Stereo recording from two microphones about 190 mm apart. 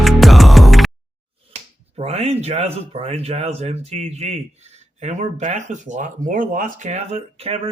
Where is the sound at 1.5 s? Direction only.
35° right (ahead or behind).